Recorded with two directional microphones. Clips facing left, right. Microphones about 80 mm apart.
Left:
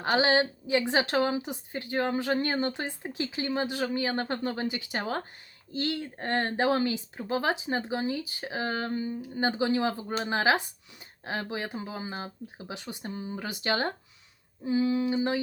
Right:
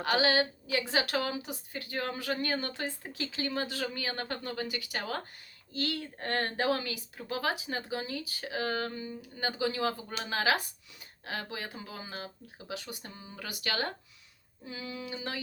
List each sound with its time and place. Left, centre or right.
0.0 s speech: left